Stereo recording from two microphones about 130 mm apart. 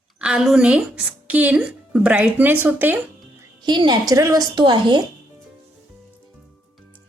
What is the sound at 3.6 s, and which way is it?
Speech, 35° right (ahead or behind).